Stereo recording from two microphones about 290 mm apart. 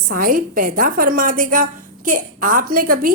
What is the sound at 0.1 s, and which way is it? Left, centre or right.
A woman's voice, right.